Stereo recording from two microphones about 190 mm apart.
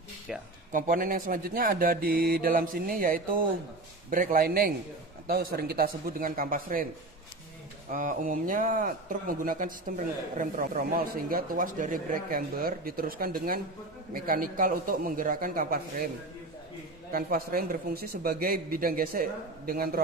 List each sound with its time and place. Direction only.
0.3 s speech: 5° right (ahead or behind)
0.7 s speech: 45° right (ahead or behind)
7.9 s speech: 45° right (ahead or behind)
17.1 s speech: 50° right (ahead or behind)